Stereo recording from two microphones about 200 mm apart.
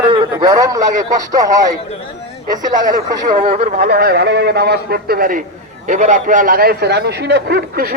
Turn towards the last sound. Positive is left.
turn(degrees=-50)  # may be behind; listen again after turning